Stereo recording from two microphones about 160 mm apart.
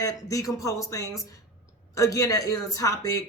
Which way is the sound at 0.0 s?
20° left (ahead or behind).